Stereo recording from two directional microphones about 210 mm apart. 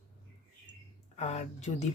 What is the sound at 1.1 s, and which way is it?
Speech, 30° left (ahead or behind).